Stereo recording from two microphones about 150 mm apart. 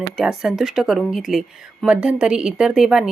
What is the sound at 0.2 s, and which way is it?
Speech, centre (ahead or behind).